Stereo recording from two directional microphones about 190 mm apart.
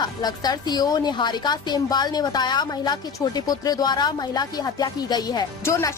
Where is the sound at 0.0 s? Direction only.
20° left (ahead or behind).